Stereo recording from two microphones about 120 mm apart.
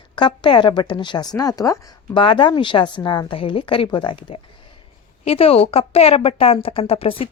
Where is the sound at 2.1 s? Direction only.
45° left (ahead or behind).